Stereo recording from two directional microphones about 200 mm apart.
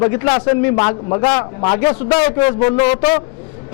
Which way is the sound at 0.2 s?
25° left (ahead or behind).